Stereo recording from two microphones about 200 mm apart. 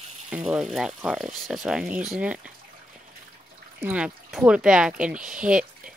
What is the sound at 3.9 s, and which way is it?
Speech, 5° right (ahead or behind).